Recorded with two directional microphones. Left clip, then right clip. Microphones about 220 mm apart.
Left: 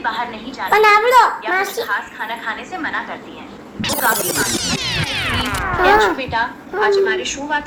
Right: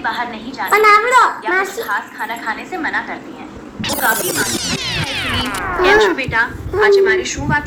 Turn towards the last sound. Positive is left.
turn(degrees=-5)  # may be behind; listen again after turning